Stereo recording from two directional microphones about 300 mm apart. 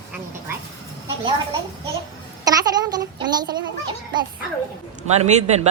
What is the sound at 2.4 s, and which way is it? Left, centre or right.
A child's voice, centre.